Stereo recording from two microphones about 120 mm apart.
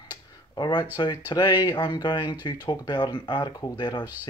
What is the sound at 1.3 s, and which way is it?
Speech, 35° left (ahead or behind).